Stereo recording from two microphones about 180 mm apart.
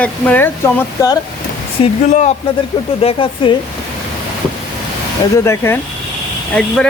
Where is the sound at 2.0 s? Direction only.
40° left (ahead or behind).